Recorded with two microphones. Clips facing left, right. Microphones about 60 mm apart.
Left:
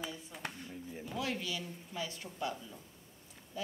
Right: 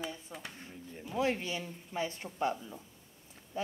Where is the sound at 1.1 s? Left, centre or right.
Right.